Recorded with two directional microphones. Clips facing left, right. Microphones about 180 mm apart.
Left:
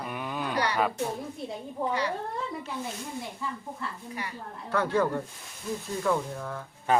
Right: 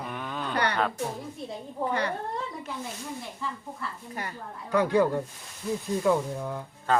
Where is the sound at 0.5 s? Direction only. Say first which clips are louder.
Right 2 dB; 60° right (ahead or behind).